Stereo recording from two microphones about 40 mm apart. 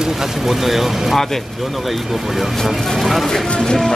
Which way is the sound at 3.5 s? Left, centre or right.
Centre.